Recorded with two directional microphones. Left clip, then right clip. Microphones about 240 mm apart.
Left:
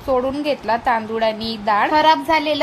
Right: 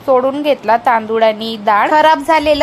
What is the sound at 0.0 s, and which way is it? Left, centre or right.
A woman's voice, centre.